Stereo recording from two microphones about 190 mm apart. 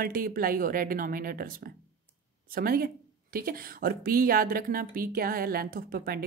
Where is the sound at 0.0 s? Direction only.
50° right (ahead or behind).